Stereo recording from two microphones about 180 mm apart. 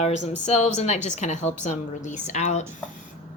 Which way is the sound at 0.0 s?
40° left (ahead or behind).